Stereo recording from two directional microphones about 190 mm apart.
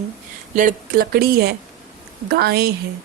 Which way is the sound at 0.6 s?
45° right (ahead or behind).